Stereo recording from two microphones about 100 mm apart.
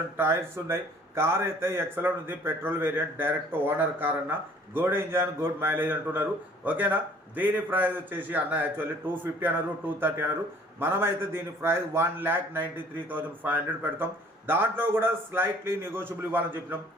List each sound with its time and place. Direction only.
0.2 s speech: 25° right (ahead or behind)